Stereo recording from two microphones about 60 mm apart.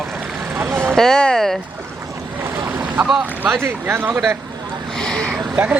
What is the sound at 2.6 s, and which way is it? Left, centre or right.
Boat, right.